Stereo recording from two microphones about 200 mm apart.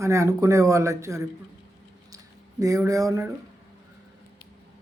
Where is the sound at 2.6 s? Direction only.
15° right (ahead or behind).